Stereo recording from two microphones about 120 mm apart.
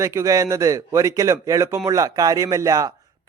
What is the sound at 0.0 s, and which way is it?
Speech, 25° right (ahead or behind).